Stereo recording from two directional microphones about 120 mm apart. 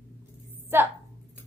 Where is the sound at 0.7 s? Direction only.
20° right (ahead or behind).